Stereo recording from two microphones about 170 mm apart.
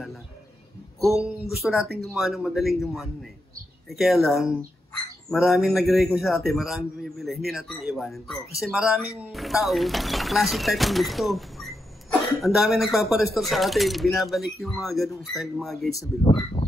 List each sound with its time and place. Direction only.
1.6 s a man's voice: centre (ahead or behind)
16.3 s speech: 30° left (ahead or behind)